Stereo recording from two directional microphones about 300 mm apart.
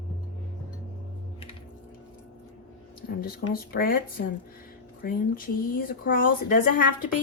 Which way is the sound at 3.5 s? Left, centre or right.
Left.